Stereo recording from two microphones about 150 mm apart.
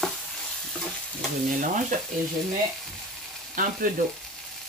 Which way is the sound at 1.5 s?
60° right (ahead or behind).